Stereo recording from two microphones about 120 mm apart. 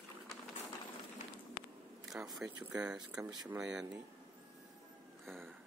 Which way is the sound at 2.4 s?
30° right (ahead or behind).